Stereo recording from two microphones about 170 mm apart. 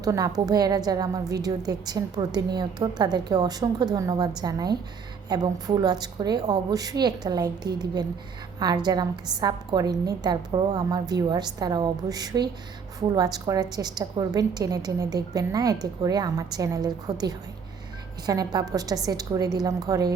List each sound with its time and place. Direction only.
0.0 s a woman's voice: 20° right (ahead or behind)